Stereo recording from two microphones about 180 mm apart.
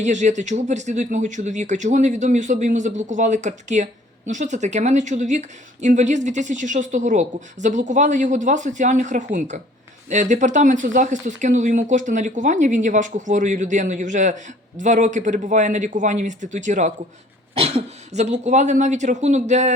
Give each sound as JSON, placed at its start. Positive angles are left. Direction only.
{"t": 0.0, "sound": "speech", "side_deg": -40}